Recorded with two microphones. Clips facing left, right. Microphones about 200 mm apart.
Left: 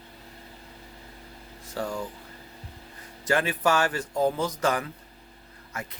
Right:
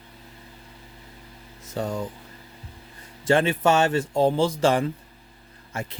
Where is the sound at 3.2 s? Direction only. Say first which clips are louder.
Right 5 dB; 25° right (ahead or behind).